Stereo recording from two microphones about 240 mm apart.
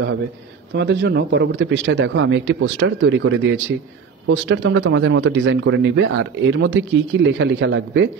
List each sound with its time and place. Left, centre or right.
0.7 s speech: right